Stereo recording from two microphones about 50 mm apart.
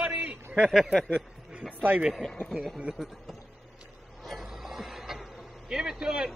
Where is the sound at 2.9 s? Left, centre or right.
Centre.